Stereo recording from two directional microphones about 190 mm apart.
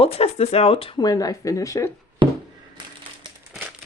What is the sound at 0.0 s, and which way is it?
Speech, 30° left (ahead or behind).